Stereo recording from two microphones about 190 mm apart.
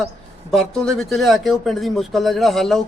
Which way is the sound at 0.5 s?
5° left (ahead or behind).